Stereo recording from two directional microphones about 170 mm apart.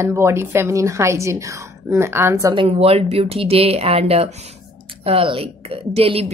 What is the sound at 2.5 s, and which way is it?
A woman's voice, 30° right (ahead or behind).